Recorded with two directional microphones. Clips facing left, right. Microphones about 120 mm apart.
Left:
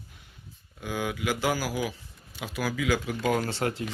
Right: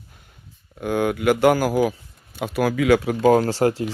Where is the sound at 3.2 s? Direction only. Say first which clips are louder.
Right 11 dB; 35° right (ahead or behind).